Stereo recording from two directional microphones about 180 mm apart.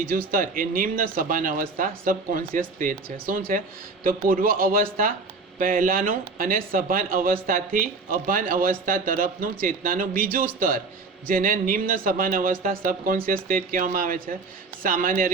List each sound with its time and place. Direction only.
0.1 s speech: 50° right (ahead or behind)